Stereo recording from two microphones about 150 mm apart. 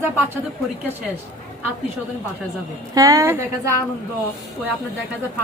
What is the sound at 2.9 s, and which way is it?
Speech, 20° right (ahead or behind).